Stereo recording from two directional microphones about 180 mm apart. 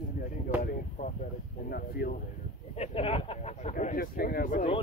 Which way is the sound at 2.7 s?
30° left (ahead or behind).